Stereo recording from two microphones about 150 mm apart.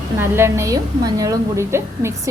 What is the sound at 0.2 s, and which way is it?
A woman's voice, 15° right (ahead or behind).